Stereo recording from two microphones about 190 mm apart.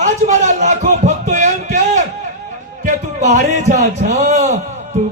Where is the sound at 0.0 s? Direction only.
40° right (ahead or behind).